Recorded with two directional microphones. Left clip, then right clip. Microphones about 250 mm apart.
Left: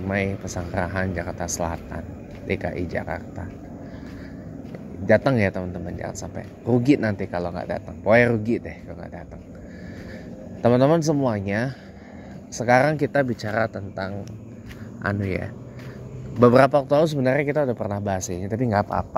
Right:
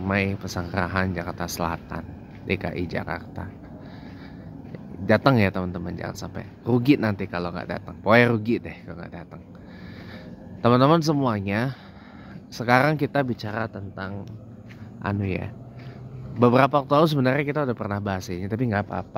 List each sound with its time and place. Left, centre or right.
0.1 s speech: centre
5.0 s speech: centre
10.6 s speech: centre